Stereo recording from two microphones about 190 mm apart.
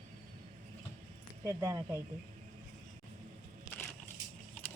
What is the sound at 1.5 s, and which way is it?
Speech, 15° right (ahead or behind).